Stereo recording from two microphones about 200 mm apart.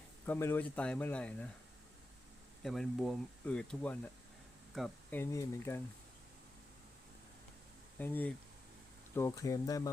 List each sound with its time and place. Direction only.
0.3 s speech: 10° left (ahead or behind)
2.6 s speech: centre (ahead or behind)
5.1 s speech: 15° left (ahead or behind)
7.9 s speech: 10° left (ahead or behind)